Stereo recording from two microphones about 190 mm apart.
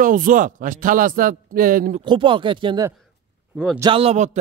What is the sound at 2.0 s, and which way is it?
A man's voice, 25° right (ahead or behind).